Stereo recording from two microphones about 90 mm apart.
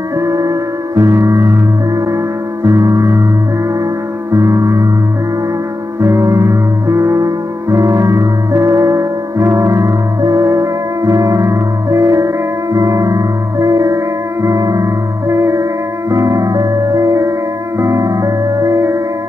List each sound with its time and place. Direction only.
0.2 s music: 40° right (ahead or behind)
2.6 s gong: 40° right (ahead or behind)
4.3 s music: 35° right (ahead or behind)
5.9 s music: 35° right (ahead or behind)